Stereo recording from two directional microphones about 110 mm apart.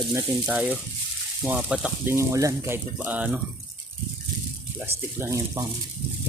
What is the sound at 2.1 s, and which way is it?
Speech, 30° right (ahead or behind).